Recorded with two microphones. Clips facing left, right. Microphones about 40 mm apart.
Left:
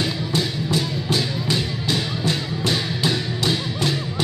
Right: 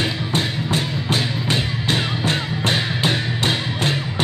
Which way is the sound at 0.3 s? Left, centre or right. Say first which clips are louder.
Right 1 dB; right.